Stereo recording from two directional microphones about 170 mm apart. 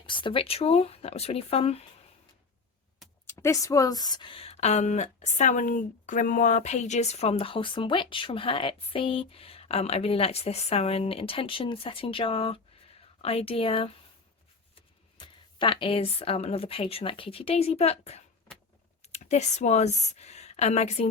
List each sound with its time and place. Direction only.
0.0 s speech: 30° left (ahead or behind)
3.2 s speech: 15° left (ahead or behind); by 21.1 s 40° left (ahead or behind)